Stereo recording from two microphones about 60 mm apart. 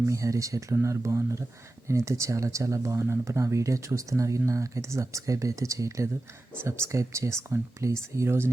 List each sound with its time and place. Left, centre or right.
0.0 s speech: right